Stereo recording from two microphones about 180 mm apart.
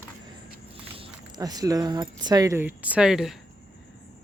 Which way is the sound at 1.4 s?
20° right (ahead or behind).